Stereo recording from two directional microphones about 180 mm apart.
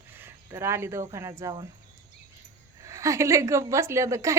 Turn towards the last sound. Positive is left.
turn(degrees=-15)  # may be behind; listen again after turning